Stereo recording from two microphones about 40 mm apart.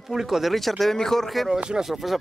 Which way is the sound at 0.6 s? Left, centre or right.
Centre.